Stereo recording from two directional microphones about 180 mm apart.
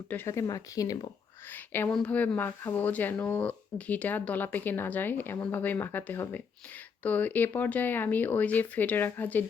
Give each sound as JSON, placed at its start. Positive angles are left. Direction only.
{"t": 0.1, "sound": "speech", "side_deg": 15}